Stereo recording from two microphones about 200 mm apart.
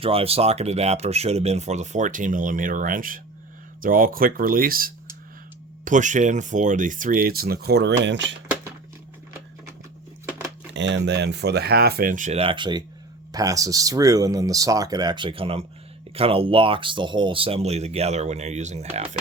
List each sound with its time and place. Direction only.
0.0 s speech: 30° right (ahead or behind); by 8.4 s 65° right (ahead or behind)
10.8 s speech: 60° right (ahead or behind); by 18.9 s 35° right (ahead or behind)